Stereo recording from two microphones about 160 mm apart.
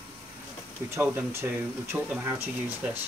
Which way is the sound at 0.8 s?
15° right (ahead or behind).